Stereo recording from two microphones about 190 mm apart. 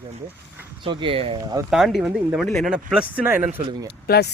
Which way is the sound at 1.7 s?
Centre (ahead or behind).